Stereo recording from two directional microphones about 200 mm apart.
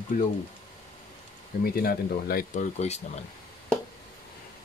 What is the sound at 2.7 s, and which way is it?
Speech, 35° left (ahead or behind).